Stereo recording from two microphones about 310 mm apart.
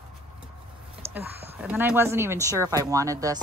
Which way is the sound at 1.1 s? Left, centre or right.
Centre.